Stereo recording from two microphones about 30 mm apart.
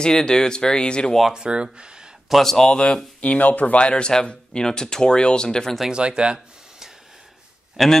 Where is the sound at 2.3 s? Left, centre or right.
Centre.